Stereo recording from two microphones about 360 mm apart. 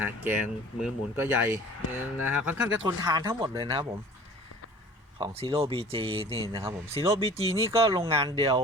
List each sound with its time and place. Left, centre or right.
0.0 s speech: centre
5.1 s speech: centre